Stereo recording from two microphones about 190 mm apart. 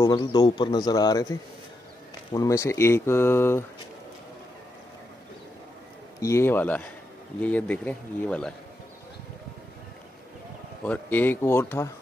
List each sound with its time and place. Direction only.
0.0 s a man's voice: 20° left (ahead or behind)
6.2 s speech: 15° left (ahead or behind)
10.9 s speech: 10° left (ahead or behind)